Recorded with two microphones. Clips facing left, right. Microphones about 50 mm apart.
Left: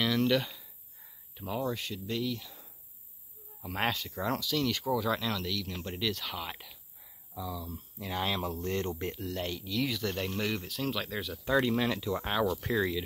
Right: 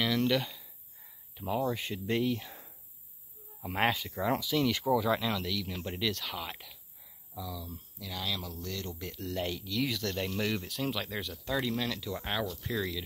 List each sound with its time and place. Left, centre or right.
0.0 s cricket: centre
1.3 s speech: centre
1.8 s speech: right
3.7 s speech: centre
7.7 s speech: left
9.2 s speech: centre